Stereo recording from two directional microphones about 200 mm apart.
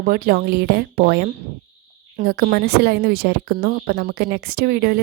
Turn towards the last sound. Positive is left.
turn(degrees=-50)  # may be behind; listen again after turning